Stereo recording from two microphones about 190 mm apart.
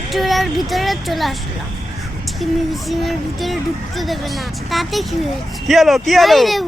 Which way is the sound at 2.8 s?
Centre (ahead or behind).